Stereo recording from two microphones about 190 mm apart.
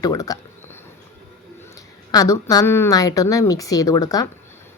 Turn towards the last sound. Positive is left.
turn(degrees=20)  # may be behind; listen again after turning